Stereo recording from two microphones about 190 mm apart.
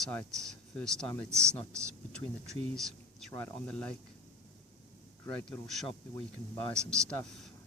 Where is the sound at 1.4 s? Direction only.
15° right (ahead or behind).